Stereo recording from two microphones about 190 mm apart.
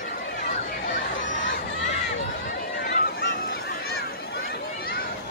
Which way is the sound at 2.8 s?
50° left (ahead or behind).